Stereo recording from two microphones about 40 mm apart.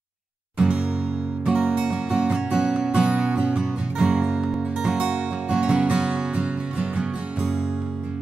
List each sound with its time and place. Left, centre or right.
0.6 s music: right